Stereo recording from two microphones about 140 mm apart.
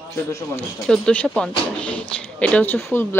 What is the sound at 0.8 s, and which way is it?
Speech, 5° left (ahead or behind).